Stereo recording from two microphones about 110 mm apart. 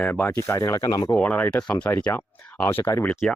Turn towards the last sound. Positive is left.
turn(degrees=20)  # may be behind; listen again after turning